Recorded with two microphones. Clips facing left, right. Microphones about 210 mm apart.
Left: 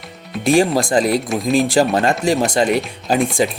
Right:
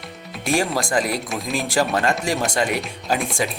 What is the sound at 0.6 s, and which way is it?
Speech, 35° left (ahead or behind).